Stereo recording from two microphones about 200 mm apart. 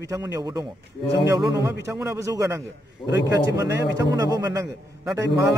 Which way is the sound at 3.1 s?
60° left (ahead or behind).